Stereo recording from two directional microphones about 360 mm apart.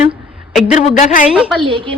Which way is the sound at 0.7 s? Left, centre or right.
Left.